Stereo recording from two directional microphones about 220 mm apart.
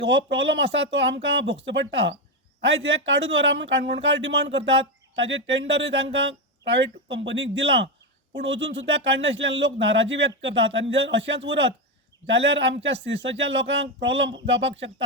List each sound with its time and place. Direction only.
0.0 s speech: 55° right (ahead or behind)